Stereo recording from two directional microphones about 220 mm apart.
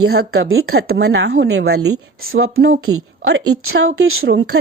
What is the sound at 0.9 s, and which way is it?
Speech, 65° right (ahead or behind).